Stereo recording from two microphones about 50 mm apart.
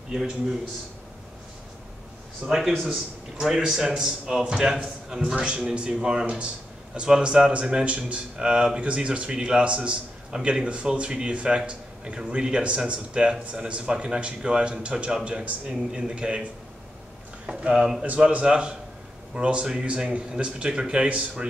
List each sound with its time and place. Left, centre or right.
2.4 s a man's voice: centre
17.5 s a man's voice: centre
18.0 s speech: right